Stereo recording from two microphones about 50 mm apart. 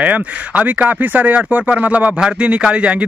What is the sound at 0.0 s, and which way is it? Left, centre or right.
Speech, right.